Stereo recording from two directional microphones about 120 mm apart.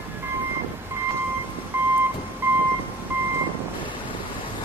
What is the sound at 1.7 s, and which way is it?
Vehicle, 15° right (ahead or behind).